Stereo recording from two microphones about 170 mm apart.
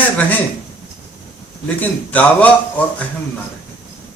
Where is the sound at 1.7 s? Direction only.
10° left (ahead or behind).